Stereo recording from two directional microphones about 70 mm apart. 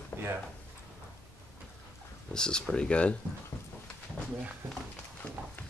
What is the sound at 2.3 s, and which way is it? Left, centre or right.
Speech, centre.